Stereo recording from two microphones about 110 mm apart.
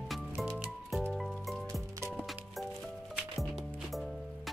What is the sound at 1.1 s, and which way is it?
Music, centre (ahead or behind).